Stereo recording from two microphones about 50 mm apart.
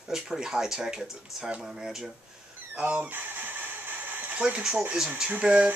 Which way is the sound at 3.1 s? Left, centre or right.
Right.